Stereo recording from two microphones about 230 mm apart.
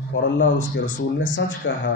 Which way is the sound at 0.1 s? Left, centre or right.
Left.